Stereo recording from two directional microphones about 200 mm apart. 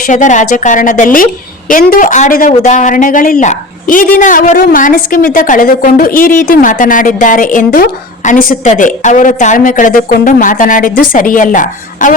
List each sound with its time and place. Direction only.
0.1 s speech: 40° left (ahead or behind)